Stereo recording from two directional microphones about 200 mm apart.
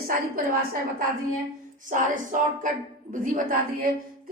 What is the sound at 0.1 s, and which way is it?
A woman's voice, 45° right (ahead or behind).